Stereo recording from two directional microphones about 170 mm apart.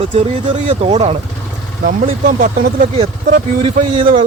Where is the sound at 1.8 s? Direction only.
55° right (ahead or behind).